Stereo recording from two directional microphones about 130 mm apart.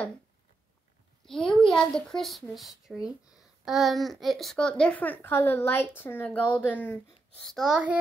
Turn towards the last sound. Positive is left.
turn(degrees=-10)  # may be behind; listen again after turning